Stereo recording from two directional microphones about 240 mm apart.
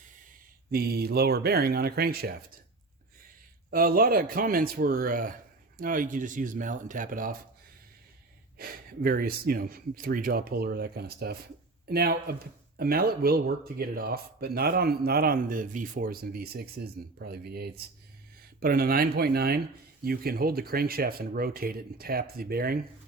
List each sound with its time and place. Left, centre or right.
0.7 s speech: right
3.7 s speech: right
8.5 s speech: right